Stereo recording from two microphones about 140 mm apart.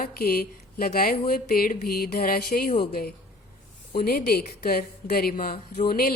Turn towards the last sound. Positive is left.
turn(degrees=90)